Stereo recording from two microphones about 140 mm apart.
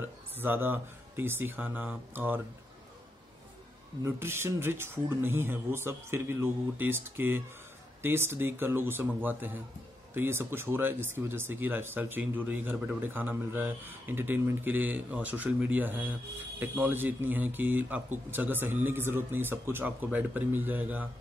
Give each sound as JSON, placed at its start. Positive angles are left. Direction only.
{"t": 0.0, "sound": "speech", "side_deg": -15}
{"t": 4.0, "sound": "speech", "side_deg": -15}